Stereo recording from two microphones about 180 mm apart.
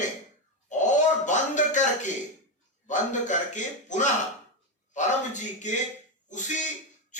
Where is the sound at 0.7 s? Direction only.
45° left (ahead or behind).